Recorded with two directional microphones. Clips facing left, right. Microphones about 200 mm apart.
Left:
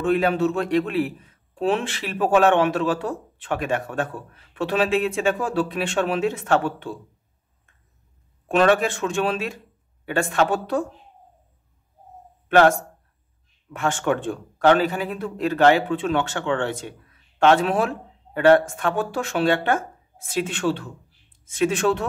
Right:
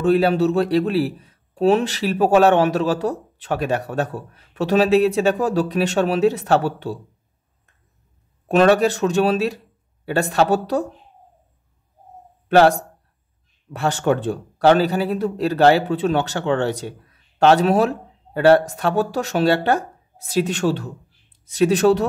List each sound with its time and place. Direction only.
0.0 s a man's voice: 35° right (ahead or behind)
8.5 s a man's voice: 40° right (ahead or behind)
12.4 s a man's voice: 35° right (ahead or behind)